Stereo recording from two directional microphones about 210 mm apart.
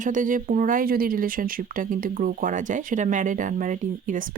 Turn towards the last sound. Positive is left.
turn(degrees=-40)  # may be behind; listen again after turning